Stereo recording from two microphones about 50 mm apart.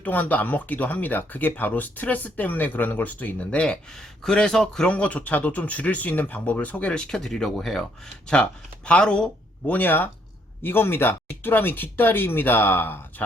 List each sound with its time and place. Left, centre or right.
0.0 s speech: left
3.9 s speech: centre
4.9 s speech: left
6.9 s speech: centre
9.6 s speech: left
10.6 s speech: left